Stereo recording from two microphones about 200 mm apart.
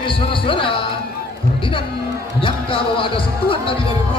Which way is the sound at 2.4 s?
25° left (ahead or behind).